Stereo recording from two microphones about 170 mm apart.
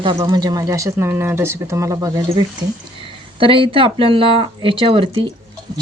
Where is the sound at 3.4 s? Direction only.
30° right (ahead or behind).